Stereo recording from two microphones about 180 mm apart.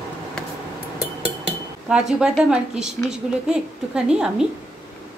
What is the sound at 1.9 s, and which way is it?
A woman's voice, 5° right (ahead or behind).